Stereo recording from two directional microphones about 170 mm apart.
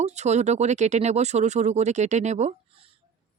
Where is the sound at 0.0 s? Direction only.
40° right (ahead or behind).